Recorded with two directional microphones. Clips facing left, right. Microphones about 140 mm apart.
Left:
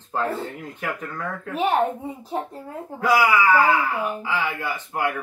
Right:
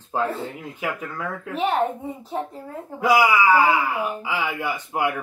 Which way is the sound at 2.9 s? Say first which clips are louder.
Right 1 dB; 15° right (ahead or behind).